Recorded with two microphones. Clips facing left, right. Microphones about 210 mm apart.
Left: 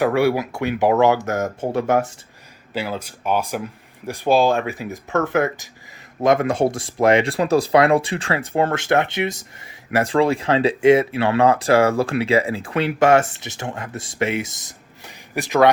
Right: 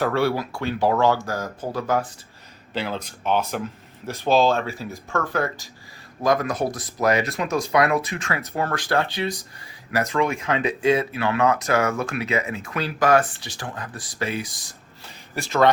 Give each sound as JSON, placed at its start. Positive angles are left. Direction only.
{"t": 0.0, "sound": "speech", "side_deg": 15}
{"t": 2.7, "sound": "speech", "side_deg": 10}